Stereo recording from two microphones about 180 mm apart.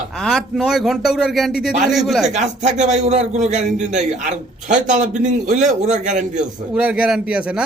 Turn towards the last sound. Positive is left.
turn(degrees=-5)  # may be behind; listen again after turning